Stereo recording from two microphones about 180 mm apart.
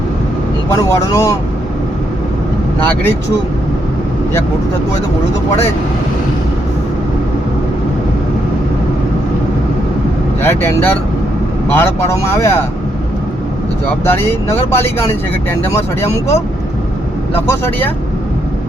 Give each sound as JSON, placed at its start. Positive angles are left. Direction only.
{"t": 0.8, "sound": "speech", "side_deg": 15}
{"t": 2.8, "sound": "speech", "side_deg": 10}
{"t": 10.4, "sound": "speech", "side_deg": 10}
{"t": 14.0, "sound": "speech", "side_deg": 15}